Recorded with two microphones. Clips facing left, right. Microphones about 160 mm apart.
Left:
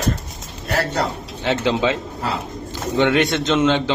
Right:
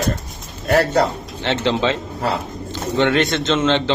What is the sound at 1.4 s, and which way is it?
A man's voice, 5° left (ahead or behind).